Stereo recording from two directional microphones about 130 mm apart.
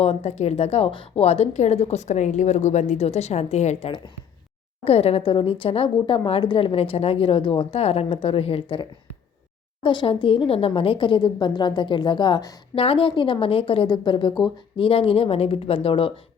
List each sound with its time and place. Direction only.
0.0 s a woman's voice: 50° left (ahead or behind)
9.8 s a woman's voice: 40° left (ahead or behind)
12.7 s a woman's voice: 45° left (ahead or behind)